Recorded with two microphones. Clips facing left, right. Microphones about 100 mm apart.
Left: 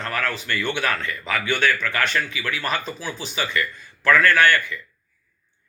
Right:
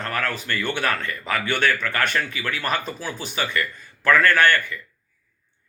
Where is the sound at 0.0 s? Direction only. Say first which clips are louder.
Even; 45° right (ahead or behind).